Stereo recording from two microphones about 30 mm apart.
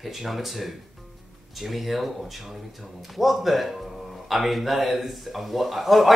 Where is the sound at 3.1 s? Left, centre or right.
Centre.